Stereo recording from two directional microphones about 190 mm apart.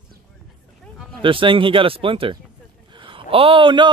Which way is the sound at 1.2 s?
25° right (ahead or behind).